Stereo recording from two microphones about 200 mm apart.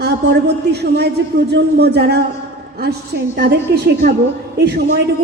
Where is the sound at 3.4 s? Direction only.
50° right (ahead or behind).